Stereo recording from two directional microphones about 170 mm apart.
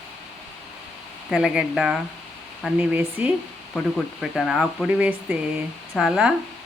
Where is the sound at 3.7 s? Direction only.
Centre (ahead or behind).